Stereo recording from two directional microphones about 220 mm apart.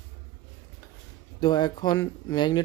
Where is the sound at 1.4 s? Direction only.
20° left (ahead or behind).